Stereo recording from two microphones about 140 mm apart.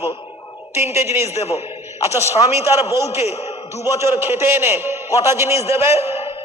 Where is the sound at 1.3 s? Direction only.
50° left (ahead or behind).